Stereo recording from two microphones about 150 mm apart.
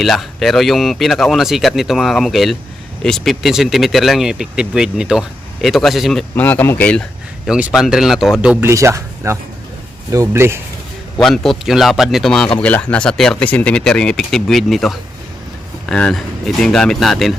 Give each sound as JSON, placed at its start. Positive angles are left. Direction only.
{"t": 0.0, "sound": "speech", "side_deg": 0}
{"t": 6.3, "sound": "speech", "side_deg": 10}
{"t": 7.4, "sound": "speech", "side_deg": -5}
{"t": 8.7, "sound": "speech", "side_deg": -20}
{"t": 11.2, "sound": "speech", "side_deg": 0}